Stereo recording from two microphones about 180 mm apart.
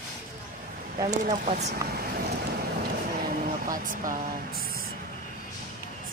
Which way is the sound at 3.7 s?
50° right (ahead or behind).